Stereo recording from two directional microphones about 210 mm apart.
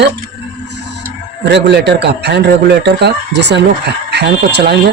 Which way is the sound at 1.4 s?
55° right (ahead or behind).